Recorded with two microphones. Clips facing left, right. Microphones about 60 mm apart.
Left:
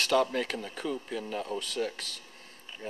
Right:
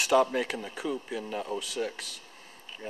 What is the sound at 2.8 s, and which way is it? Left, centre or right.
Speech, centre.